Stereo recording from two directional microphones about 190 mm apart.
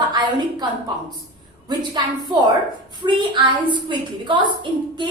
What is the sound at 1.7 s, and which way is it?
A woman's voice, 25° right (ahead or behind).